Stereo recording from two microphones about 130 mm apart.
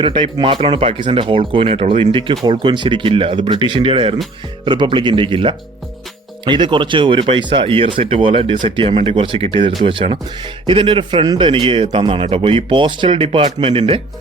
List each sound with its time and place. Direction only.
0.0 s speech: 40° right (ahead or behind)